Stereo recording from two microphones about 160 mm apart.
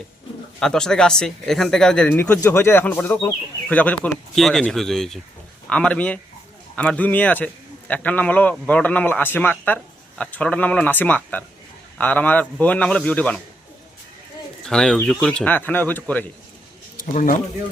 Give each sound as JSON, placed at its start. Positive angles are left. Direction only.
{"t": 0.6, "sound": "a man's voice", "side_deg": 5}
{"t": 14.6, "sound": "a man's voice", "side_deg": 5}
{"t": 17.0, "sound": "speech", "side_deg": 65}